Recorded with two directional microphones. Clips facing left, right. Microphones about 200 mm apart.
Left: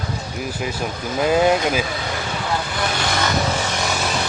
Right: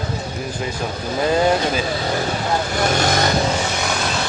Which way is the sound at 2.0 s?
40° right (ahead or behind).